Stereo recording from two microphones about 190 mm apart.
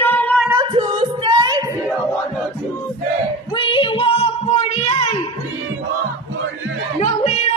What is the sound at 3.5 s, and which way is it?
Child singing, 25° left (ahead or behind).